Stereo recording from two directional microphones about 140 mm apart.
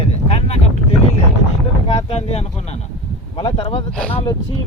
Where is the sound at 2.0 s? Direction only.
50° left (ahead or behind).